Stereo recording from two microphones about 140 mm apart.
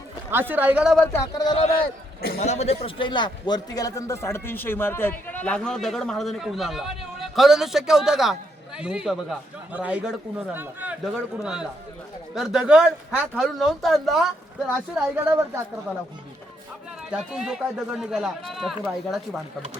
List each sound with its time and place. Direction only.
0.3 s speech: 15° right (ahead or behind)
1.1 s speech: 30° left (ahead or behind)
2.4 s a man's voice: 50° left (ahead or behind); by 14.3 s centre (ahead or behind)
15.2 s speech: 20° right (ahead or behind)
17.1 s a man's voice: 5° right (ahead or behind)